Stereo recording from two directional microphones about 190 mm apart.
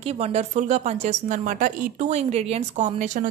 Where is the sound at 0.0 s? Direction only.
35° right (ahead or behind).